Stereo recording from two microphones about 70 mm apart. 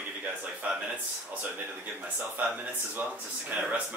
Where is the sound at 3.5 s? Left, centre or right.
Centre.